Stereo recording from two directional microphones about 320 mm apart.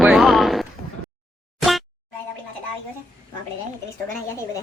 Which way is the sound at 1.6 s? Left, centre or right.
Centre.